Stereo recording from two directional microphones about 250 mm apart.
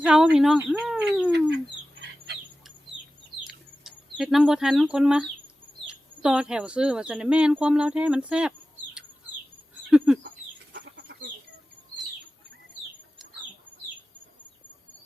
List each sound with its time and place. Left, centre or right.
0.0 s speech: centre
3.4 s bird: centre
5.9 s speech: centre
10.2 s chicken: right